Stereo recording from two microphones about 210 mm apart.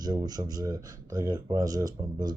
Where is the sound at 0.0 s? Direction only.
20° right (ahead or behind).